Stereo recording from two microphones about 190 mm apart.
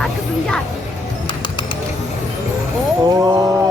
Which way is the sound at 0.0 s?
5° left (ahead or behind).